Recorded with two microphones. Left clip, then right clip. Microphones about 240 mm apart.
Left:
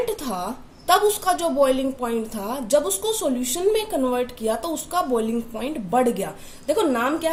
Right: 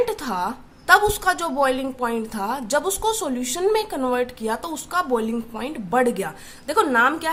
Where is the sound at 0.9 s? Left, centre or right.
Right.